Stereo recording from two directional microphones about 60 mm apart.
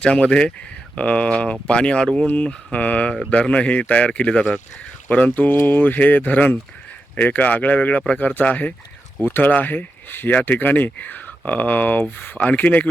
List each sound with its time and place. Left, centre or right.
0.0 s speech: centre
5.0 s speech: left